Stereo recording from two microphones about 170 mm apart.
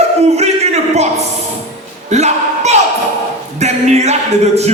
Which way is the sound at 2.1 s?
40° right (ahead or behind).